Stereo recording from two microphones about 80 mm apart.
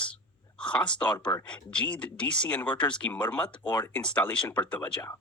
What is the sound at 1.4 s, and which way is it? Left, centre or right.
A woman's voice, centre.